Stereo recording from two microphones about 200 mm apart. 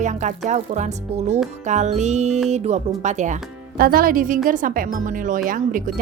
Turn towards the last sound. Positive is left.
turn(degrees=-40)  # may be behind; listen again after turning